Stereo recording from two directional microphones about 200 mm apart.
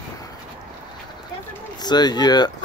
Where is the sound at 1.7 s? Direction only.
20° left (ahead or behind).